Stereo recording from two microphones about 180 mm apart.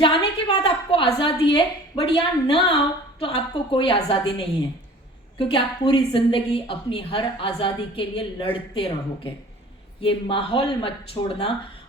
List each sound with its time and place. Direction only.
0.0 s a woman's voice: 30° left (ahead or behind)